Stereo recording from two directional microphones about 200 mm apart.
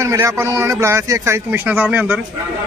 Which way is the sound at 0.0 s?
15° right (ahead or behind).